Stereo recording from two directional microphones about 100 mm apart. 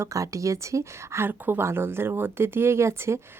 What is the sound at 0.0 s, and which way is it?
Speech, 35° right (ahead or behind).